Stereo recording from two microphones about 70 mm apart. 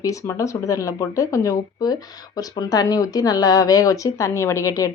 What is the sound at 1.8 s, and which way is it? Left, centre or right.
A woman's voice, left.